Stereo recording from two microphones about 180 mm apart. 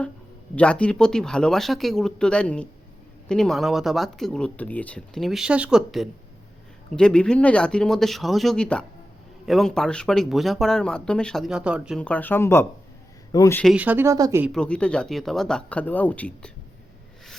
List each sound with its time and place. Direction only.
0.5 s speech: 5° left (ahead or behind)
12.0 s speech: 10° left (ahead or behind)
13.7 s speech: 10° right (ahead or behind)
14.4 s speech: 5° left (ahead or behind)